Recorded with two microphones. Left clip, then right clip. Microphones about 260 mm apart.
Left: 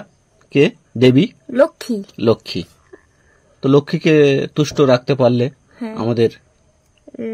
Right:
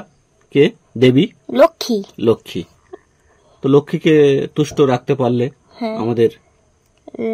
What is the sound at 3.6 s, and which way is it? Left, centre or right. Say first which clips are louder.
Speech: right 1 dB; centre.